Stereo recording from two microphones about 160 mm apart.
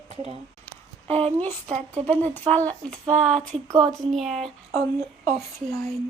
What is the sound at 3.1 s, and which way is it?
Speech, 50° right (ahead or behind).